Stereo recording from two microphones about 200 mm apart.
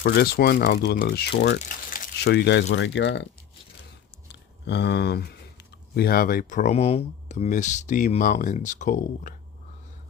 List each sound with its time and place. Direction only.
0.0 s speech: 50° left (ahead or behind)
4.3 s speech: 60° left (ahead or behind); by 9.3 s 40° left (ahead or behind)